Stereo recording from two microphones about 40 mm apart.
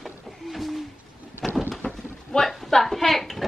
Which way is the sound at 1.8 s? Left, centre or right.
Left.